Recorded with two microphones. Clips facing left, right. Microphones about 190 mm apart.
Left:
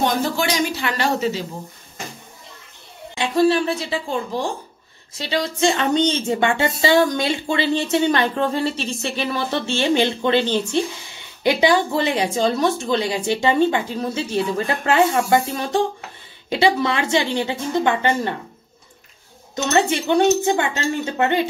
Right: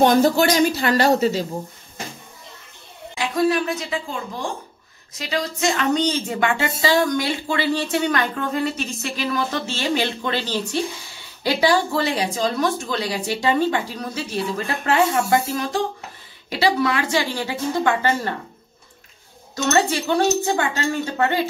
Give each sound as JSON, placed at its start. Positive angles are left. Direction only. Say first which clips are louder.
{"t": 0.0, "sound": "speech", "louder": "right 5 dB", "side_deg": -45}
{"t": 3.2, "sound": "a woman's voice", "louder": "left 3 dB", "side_deg": 30}
{"t": 19.5, "sound": "speech", "louder": "left 1 dB", "side_deg": 20}